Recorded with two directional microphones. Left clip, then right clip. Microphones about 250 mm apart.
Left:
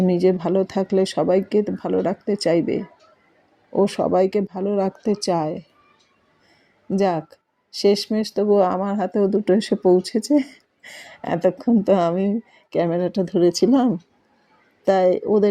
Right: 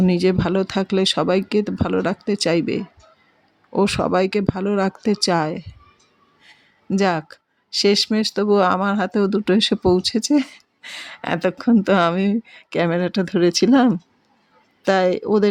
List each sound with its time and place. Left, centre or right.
0.0 s speech: right
3.7 s speech: right
4.3 s speech: right
6.9 s speech: right